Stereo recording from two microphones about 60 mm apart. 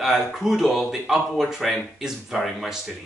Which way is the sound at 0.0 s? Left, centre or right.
Centre.